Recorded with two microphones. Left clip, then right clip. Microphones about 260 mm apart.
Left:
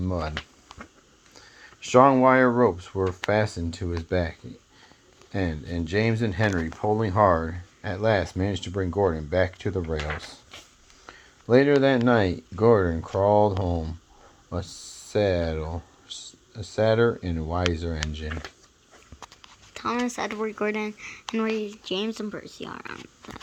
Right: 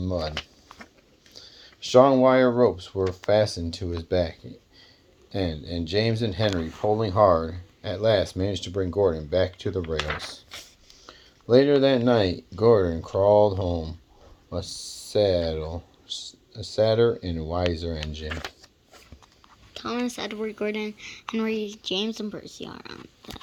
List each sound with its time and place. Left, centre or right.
0.0 s speech: left
1.4 s speech: left
19.7 s a sound: centre
20.1 s speech: centre